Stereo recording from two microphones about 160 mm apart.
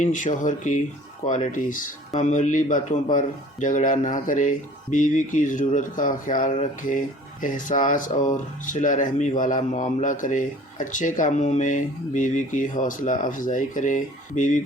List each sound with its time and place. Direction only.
0.0 s speech: 50° left (ahead or behind)